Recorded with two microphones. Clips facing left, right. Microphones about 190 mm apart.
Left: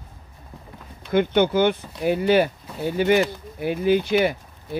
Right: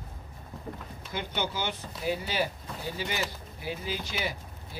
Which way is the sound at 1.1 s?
60° left (ahead or behind).